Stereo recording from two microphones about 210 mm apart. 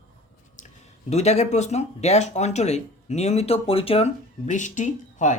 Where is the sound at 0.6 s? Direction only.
30° left (ahead or behind).